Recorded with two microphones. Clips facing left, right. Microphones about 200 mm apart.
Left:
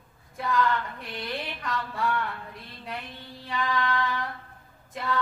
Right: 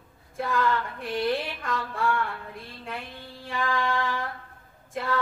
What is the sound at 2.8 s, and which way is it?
Female singing, 50° right (ahead or behind).